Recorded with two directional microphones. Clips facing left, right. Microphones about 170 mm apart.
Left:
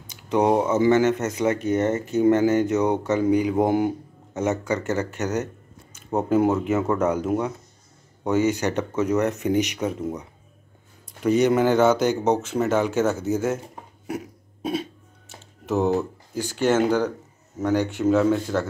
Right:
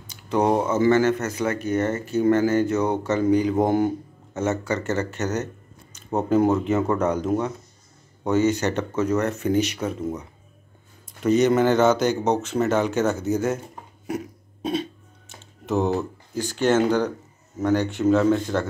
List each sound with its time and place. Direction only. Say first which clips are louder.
0.1 s speech: left 1 dB; 15° left (ahead or behind)
11.2 s speech: right 1 dB; 10° left (ahead or behind)
14.0 s throat clearing: right 2 dB; 5° left (ahead or behind)
17.6 s speech: right 1 dB; 10° left (ahead or behind)